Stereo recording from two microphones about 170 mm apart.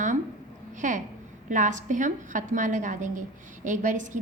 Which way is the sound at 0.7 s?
50° right (ahead or behind).